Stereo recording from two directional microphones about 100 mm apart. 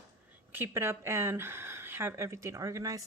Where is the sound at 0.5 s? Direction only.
25° right (ahead or behind).